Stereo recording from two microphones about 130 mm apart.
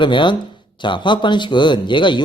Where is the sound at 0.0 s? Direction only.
40° left (ahead or behind).